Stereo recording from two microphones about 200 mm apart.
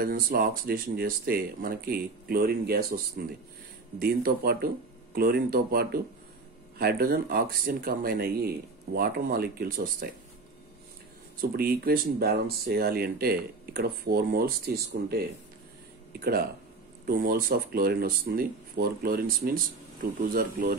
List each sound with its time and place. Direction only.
0.0 s speech: 45° right (ahead or behind)
11.5 s speech: 50° right (ahead or behind)
17.0 s speech: 50° right (ahead or behind)